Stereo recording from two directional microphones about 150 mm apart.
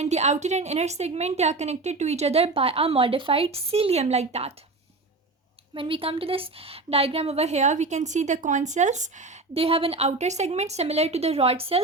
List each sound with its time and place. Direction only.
0.0 s a woman's voice: 50° right (ahead or behind)
5.7 s a woman's voice: 35° right (ahead or behind)